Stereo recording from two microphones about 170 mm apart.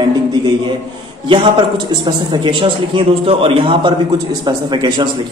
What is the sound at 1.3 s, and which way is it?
A man's voice, 25° right (ahead or behind).